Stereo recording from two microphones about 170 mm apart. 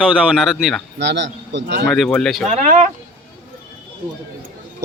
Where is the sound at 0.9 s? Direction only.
90° right.